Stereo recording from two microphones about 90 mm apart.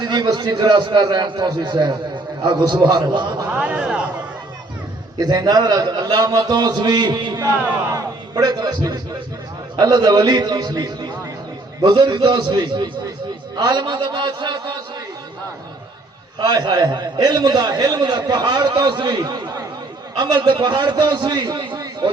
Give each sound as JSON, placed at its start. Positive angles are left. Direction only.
{"t": 0.0, "sound": "a man's voice", "side_deg": -55}
{"t": 3.5, "sound": "a sound", "side_deg": -15}
{"t": 5.1, "sound": "a man's voice", "side_deg": -50}
{"t": 7.5, "sound": "speech", "side_deg": -20}
{"t": 7.9, "sound": "music", "side_deg": -50}
{"t": 9.7, "sound": "a man's voice", "side_deg": -50}
{"t": 16.4, "sound": "a man's voice", "side_deg": -55}